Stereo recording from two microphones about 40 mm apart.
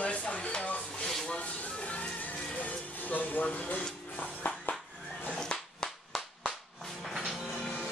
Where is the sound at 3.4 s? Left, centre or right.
Left.